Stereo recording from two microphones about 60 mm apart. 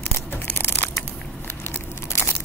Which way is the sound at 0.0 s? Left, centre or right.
Left.